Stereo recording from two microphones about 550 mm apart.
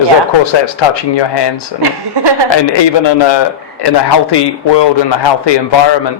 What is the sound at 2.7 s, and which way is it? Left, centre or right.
A man's voice, left.